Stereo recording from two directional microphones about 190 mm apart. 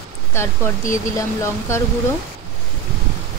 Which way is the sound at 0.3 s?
15° left (ahead or behind).